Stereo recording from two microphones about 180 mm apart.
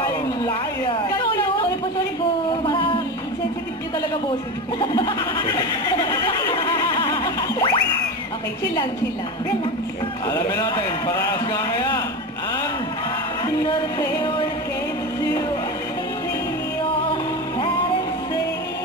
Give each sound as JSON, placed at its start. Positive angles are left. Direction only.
{"t": 1.1, "sound": "a sound", "side_deg": 25}
{"t": 2.6, "sound": "music", "side_deg": 30}
{"t": 4.7, "sound": "a sound", "side_deg": 25}
{"t": 5.9, "sound": "boing", "side_deg": 20}
{"t": 10.2, "sound": "a man's voice", "side_deg": 20}
{"t": 13.7, "sound": "a man's voice", "side_deg": 25}